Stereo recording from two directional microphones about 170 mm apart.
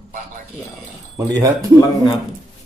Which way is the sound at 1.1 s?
20° right (ahead or behind).